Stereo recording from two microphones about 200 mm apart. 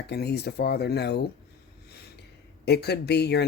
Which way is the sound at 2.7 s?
55° left (ahead or behind).